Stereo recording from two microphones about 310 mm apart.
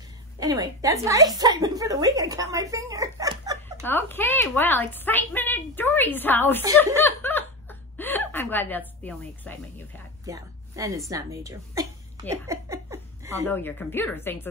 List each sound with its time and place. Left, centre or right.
0.4 s a woman's voice: centre
3.8 s a woman's voice: centre
7.0 s chuckle: centre
8.0 s a woman's voice: centre
10.2 s a woman's voice: centre
11.1 s a sound: centre
13.5 s a woman's voice: centre